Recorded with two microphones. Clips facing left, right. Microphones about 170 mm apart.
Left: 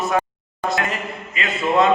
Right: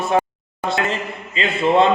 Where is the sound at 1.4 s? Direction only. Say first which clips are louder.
Right 3 dB; 30° right (ahead or behind).